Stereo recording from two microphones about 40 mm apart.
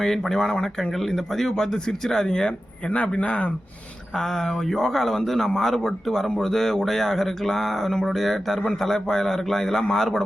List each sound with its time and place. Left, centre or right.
0.0 s speech: centre
3.2 s speech: left
4.1 s speech: centre